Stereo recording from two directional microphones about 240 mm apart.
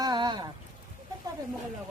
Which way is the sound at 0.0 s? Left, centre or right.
Centre.